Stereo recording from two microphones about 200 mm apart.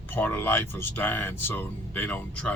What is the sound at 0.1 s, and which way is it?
Speech, 10° left (ahead or behind).